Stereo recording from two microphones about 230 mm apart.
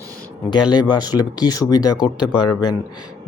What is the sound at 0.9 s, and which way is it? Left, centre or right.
Speech, centre.